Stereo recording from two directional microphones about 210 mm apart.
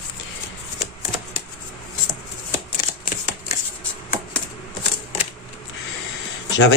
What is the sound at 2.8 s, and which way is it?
Shuffling cards, 35° left (ahead or behind).